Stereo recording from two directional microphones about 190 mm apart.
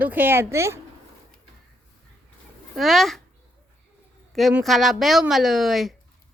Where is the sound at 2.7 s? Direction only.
Centre (ahead or behind).